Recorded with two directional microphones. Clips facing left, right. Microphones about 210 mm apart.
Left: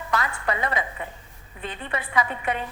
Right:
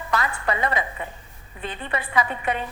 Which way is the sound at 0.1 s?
35° right (ahead or behind).